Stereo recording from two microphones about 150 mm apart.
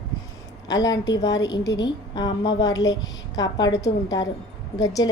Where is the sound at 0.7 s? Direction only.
25° left (ahead or behind).